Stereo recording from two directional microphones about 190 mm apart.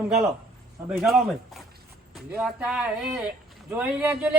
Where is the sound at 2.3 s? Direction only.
5° right (ahead or behind).